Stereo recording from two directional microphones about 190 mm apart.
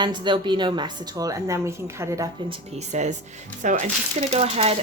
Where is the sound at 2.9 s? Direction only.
40° right (ahead or behind).